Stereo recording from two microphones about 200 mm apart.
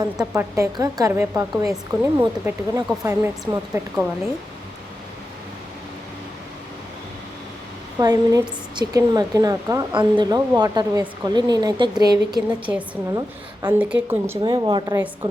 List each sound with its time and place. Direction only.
0.0 s a woman's voice: 15° right (ahead or behind)
7.9 s a woman's voice: 20° right (ahead or behind)
13.7 s a woman's voice: 5° right (ahead or behind)
14.4 s a woman's voice: 20° right (ahead or behind)